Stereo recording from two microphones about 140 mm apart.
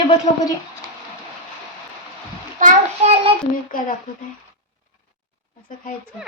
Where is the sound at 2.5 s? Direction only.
55° right (ahead or behind).